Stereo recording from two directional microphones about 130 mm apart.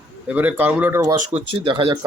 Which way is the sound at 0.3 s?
15° right (ahead or behind).